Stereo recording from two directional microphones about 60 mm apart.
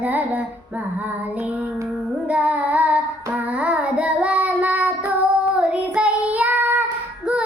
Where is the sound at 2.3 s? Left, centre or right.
Right.